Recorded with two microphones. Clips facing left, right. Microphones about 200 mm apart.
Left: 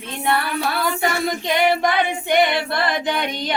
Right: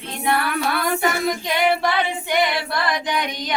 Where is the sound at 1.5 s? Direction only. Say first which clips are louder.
Left 3 dB; 20° left (ahead or behind).